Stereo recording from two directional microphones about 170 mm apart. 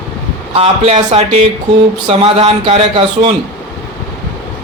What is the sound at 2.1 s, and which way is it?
Speech, 35° right (ahead or behind).